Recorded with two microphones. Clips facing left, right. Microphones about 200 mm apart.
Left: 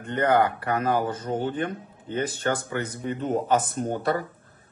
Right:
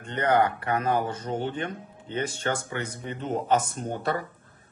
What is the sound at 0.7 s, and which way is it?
Speech, 40° left (ahead or behind).